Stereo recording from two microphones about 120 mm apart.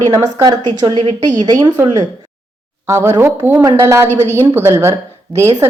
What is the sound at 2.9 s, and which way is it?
A woman's voice, 20° right (ahead or behind).